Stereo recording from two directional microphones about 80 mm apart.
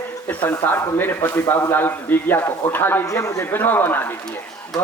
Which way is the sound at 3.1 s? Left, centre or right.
Left.